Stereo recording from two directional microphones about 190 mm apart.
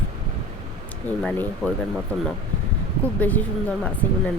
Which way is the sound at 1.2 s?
5° left (ahead or behind).